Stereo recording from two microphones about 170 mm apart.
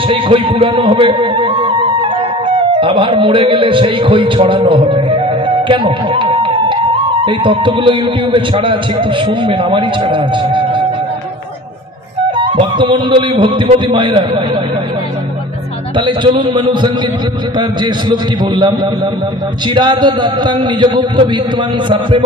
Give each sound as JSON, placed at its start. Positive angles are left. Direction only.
{"t": 0.1, "sound": "music", "side_deg": -30}
{"t": 2.5, "sound": "a man's voice", "side_deg": -30}
{"t": 12.4, "sound": "a man's voice", "side_deg": -25}
{"t": 16.0, "sound": "a man's voice", "side_deg": -30}